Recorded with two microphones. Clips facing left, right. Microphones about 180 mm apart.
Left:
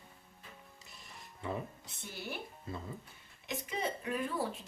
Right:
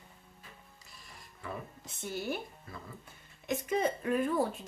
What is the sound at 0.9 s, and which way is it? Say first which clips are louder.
Music: even; 25° left (ahead or behind).